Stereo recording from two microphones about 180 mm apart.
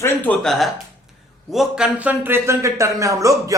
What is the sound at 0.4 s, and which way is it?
Speech, centre (ahead or behind).